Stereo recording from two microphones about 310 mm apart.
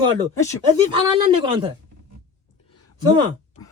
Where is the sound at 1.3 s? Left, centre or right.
Centre.